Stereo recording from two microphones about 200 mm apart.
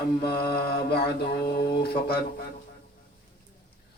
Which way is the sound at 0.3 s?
50° left (ahead or behind).